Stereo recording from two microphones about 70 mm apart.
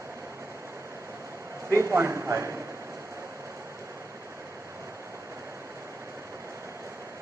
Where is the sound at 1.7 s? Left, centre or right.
Right.